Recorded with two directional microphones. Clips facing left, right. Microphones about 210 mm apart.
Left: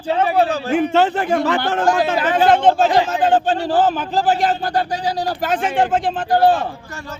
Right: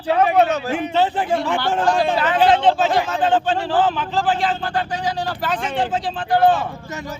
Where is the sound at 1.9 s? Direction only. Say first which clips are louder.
Left 2 dB; 45° left (ahead or behind).